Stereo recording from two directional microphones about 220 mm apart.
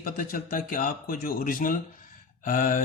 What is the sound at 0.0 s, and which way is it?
Speech, 40° left (ahead or behind).